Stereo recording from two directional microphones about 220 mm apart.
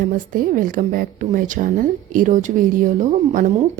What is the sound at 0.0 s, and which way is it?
A woman's voice, 40° right (ahead or behind).